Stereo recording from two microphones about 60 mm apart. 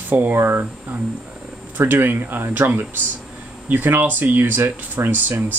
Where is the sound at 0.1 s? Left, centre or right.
Right.